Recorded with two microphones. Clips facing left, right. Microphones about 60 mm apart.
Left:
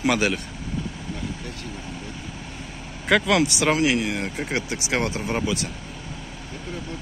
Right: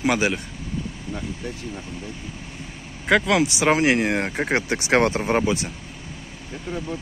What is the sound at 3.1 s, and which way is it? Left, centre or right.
Speech, centre.